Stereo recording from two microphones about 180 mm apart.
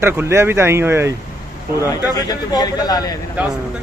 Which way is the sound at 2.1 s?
20° left (ahead or behind).